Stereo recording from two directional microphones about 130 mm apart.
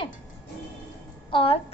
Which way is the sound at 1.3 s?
45° left (ahead or behind).